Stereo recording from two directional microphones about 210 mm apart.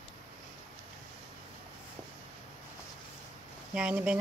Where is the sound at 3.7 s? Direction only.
5° right (ahead or behind).